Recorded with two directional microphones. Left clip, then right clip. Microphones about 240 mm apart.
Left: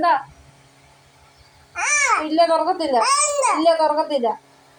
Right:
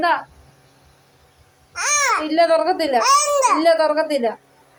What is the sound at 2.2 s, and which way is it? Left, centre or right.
Speech, right.